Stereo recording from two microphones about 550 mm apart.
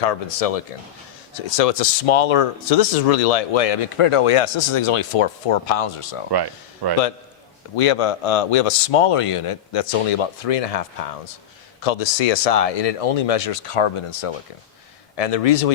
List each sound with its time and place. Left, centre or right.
0.0 s speech: left
6.3 s speech: right
7.8 s speech: left
15.1 s speech: left